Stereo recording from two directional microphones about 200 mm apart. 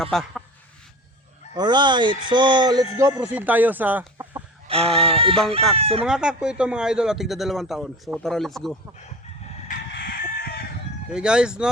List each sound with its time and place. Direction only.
0.0 s a man's voice: centre (ahead or behind)
1.5 s speech: 20° right (ahead or behind)
3.0 s speech: 10° right (ahead or behind)
4.7 s speech: 30° right (ahead or behind)
6.1 s a man's voice: 5° right (ahead or behind)
9.9 s chicken: 50° left (ahead or behind)
11.1 s a man's voice: 5° right (ahead or behind)